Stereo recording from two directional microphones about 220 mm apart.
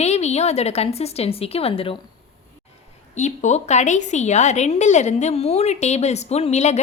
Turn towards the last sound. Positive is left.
turn(degrees=30)  # may be behind; listen again after turning